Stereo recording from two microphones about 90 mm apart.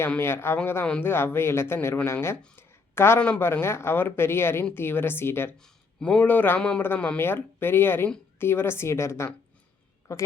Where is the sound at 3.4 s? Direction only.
30° left (ahead or behind).